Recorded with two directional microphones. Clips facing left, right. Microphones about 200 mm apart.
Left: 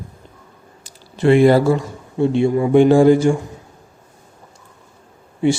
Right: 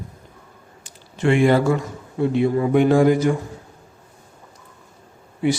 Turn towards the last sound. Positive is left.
turn(degrees=25)  # may be behind; listen again after turning